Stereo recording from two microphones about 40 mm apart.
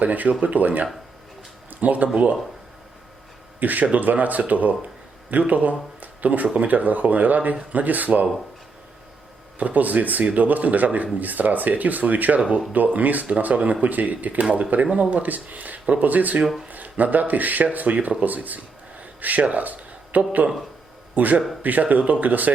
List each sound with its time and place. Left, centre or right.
0.0 s speech: right
3.6 s speech: right
9.6 s speech: right